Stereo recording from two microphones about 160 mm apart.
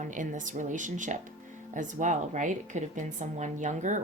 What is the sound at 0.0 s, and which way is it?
Speech, 55° right (ahead or behind).